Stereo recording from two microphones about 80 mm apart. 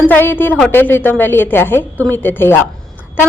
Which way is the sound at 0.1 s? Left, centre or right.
Left.